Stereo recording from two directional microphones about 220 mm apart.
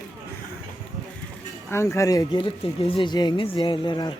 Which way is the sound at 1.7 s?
15° left (ahead or behind).